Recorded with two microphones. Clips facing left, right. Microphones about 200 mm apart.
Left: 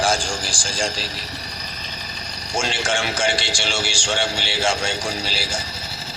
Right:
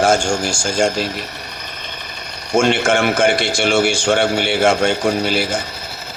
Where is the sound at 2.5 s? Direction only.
50° right (ahead or behind).